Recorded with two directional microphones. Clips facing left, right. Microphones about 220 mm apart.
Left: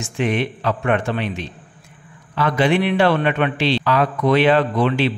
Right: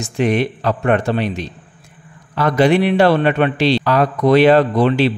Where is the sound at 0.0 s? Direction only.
40° right (ahead or behind).